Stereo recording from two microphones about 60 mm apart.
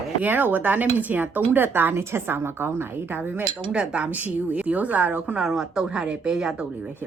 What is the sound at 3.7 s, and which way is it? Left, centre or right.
A woman's voice, centre.